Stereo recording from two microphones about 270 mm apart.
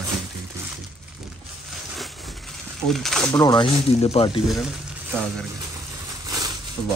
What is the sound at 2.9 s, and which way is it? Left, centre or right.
Speech, centre.